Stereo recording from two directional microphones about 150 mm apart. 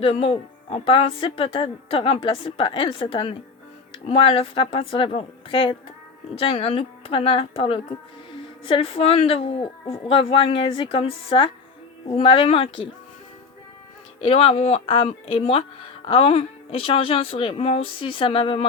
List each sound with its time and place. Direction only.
0.0 s speech: 40° left (ahead or behind)
14.2 s speech: 40° left (ahead or behind)